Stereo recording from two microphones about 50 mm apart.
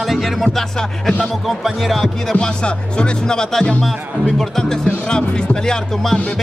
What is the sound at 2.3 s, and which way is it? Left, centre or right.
Speech, centre.